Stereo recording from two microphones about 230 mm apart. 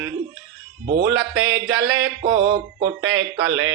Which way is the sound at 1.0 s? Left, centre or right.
Right.